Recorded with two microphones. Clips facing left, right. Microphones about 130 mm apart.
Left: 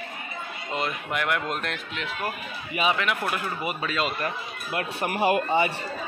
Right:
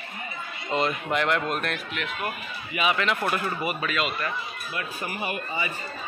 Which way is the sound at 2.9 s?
10° left (ahead or behind).